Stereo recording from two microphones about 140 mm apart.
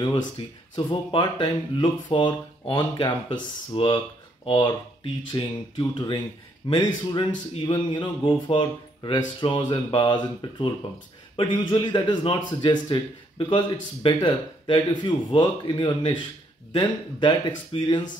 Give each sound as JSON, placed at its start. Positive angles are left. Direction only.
{"t": 0.4, "sound": "a man's voice", "side_deg": 40}